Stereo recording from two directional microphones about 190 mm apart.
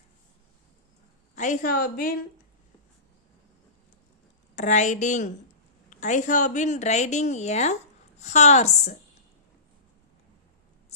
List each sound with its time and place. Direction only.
1.4 s a woman's voice: 40° left (ahead or behind)
4.5 s a woman's voice: 40° left (ahead or behind)